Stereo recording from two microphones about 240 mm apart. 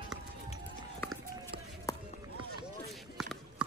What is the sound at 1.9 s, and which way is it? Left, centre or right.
Run, centre.